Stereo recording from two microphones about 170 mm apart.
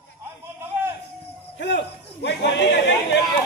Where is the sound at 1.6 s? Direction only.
90° left.